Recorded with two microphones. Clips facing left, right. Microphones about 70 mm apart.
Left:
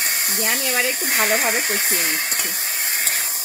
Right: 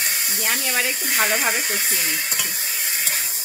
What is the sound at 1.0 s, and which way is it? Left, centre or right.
Speech, left.